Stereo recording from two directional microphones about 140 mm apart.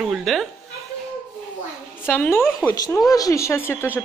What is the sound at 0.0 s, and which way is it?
Speech, centre (ahead or behind).